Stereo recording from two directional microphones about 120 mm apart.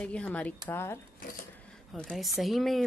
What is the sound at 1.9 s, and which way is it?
Speech, 5° left (ahead or behind).